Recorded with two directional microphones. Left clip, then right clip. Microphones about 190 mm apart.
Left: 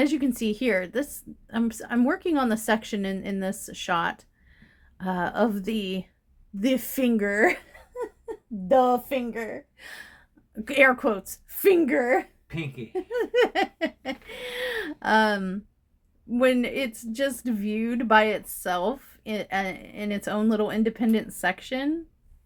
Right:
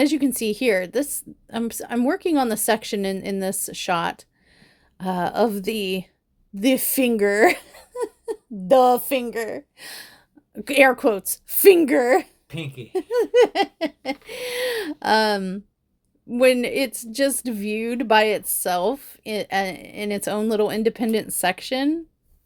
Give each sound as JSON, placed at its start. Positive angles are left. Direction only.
{"t": 0.0, "sound": "a woman's voice", "side_deg": -30}